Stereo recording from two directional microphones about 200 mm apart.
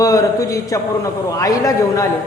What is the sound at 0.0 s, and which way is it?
A man's voice, 15° left (ahead or behind).